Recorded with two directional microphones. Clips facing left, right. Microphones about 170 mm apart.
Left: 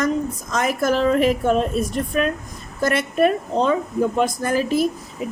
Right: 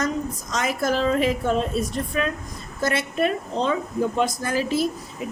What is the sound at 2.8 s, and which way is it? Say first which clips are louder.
A woman's voice: left 5 dB; 50° left (ahead or behind).